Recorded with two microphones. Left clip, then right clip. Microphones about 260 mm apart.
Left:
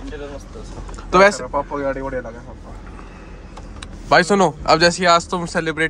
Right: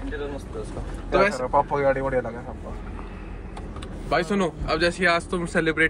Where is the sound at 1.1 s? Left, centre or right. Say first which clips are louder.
Left 8 dB; left.